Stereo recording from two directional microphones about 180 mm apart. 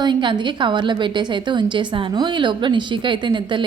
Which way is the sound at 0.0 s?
25° right (ahead or behind).